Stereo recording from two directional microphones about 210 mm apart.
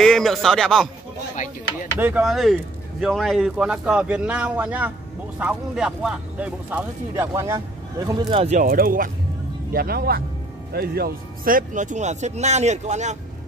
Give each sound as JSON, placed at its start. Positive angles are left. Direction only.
{"t": 0.0, "sound": "speech", "side_deg": 0}
{"t": 2.0, "sound": "speech", "side_deg": -5}
{"t": 8.4, "sound": "speech", "side_deg": -35}